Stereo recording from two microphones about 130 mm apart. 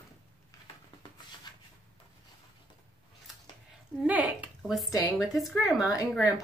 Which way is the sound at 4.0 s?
10° right (ahead or behind).